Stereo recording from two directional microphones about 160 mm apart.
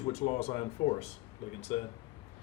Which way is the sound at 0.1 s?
40° left (ahead or behind).